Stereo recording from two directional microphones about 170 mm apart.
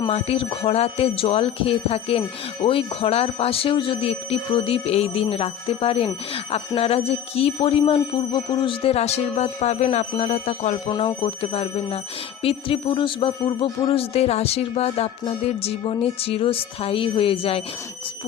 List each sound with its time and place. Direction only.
0.1 s speech: 35° left (ahead or behind)
10.8 s speech: 30° left (ahead or behind)